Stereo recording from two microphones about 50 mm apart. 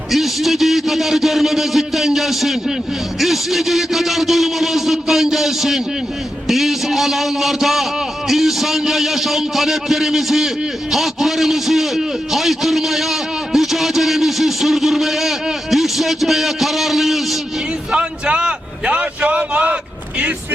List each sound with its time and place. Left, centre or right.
0.1 s a man's voice: centre
17.9 s a man's voice: right